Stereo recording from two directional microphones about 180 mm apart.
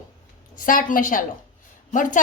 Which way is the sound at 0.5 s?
50° left (ahead or behind).